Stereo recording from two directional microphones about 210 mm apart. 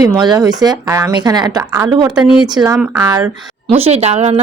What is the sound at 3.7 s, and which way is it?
Speech, 30° right (ahead or behind).